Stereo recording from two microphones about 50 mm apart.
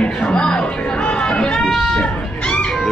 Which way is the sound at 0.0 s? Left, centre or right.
Centre.